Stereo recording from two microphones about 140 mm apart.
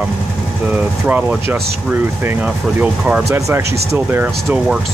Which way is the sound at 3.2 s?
20° right (ahead or behind).